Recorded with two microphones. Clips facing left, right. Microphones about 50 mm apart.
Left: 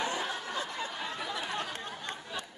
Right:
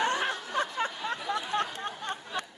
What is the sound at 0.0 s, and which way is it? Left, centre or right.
Snicker, right.